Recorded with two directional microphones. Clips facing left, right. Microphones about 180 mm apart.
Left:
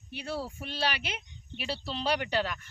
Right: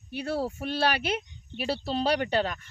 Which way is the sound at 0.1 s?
45° right (ahead or behind).